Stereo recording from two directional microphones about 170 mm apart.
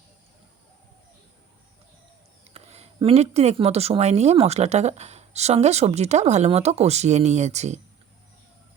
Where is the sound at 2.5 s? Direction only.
35° right (ahead or behind).